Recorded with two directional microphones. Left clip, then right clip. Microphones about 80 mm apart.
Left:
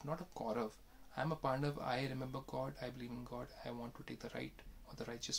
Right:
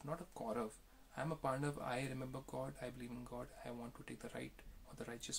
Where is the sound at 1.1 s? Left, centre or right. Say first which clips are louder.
Left 3 dB; left.